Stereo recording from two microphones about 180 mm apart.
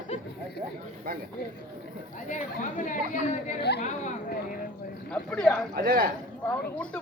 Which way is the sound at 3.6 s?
65° left (ahead or behind).